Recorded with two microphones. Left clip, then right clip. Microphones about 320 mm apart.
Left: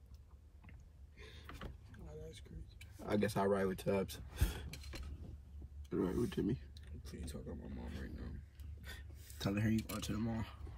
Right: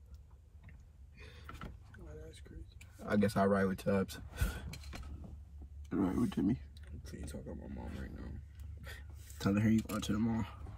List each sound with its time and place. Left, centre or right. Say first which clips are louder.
1.1 s a sound: right 1 dB; centre
2.3 s speech: right 1 dB; centre
5.9 s speech: right 3 dB; centre
9.5 s speech: right 5 dB; centre